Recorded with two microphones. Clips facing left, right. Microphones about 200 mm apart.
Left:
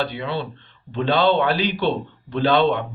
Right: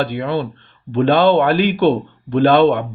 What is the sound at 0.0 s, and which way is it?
Speech, 55° right (ahead or behind).